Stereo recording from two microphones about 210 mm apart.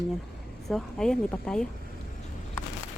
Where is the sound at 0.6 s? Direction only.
Centre (ahead or behind).